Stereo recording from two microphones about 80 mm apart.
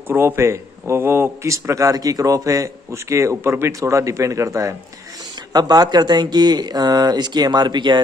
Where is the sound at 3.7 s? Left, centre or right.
Right.